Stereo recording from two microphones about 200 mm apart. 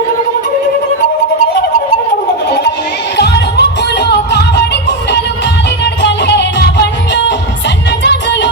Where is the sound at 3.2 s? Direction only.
55° left (ahead or behind).